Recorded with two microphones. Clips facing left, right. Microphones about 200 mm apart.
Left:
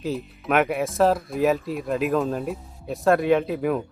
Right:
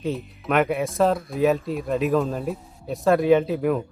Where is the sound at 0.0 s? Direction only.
Centre (ahead or behind).